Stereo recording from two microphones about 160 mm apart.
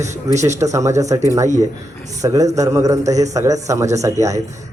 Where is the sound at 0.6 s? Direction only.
20° right (ahead or behind).